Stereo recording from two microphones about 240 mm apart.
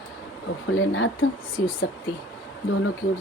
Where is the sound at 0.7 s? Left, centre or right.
Left.